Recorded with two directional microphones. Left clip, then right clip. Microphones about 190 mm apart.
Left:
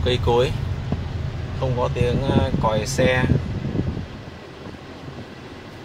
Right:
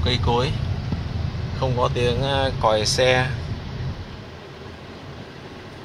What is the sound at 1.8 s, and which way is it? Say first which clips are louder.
Speech: right 1 dB; 25° right (ahead or behind).